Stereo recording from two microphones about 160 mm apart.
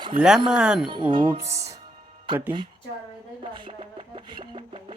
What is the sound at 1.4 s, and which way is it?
Music, 20° right (ahead or behind).